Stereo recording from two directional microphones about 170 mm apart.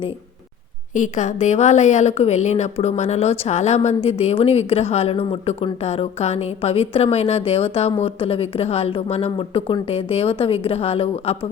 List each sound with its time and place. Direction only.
0.9 s a woman's voice: 45° left (ahead or behind)